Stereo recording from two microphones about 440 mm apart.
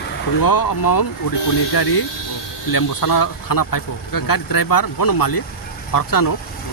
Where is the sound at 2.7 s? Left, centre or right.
Left.